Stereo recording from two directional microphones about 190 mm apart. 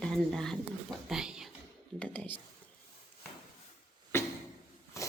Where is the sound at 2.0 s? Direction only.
10° left (ahead or behind).